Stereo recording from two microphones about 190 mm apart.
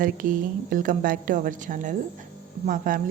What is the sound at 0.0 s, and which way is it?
A woman's voice, 45° right (ahead or behind).